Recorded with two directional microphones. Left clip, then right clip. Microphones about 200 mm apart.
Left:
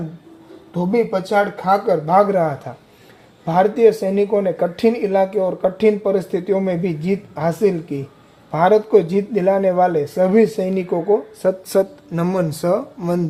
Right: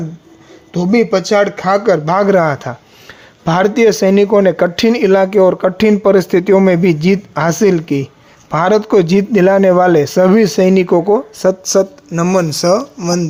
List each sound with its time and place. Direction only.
0.7 s speech: 45° right (ahead or behind)
11.4 s speech: 20° right (ahead or behind)